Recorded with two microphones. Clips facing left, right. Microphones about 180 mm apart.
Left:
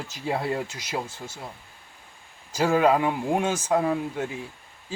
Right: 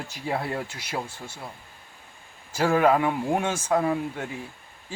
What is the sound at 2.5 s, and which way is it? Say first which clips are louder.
Speech: even; 15° left (ahead or behind).